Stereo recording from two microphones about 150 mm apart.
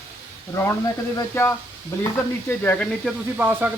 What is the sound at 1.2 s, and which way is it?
Speech, 15° left (ahead or behind).